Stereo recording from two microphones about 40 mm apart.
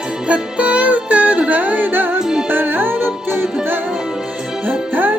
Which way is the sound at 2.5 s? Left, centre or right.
Right.